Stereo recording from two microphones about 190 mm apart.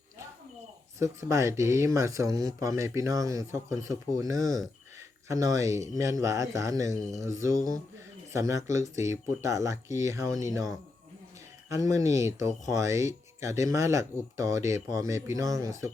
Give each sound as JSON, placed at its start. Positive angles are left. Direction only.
{"t": 0.9, "sound": "speech", "side_deg": -15}
{"t": 4.4, "sound": "speech", "side_deg": 0}
{"t": 5.3, "sound": "speech", "side_deg": -15}
{"t": 11.7, "sound": "speech", "side_deg": -15}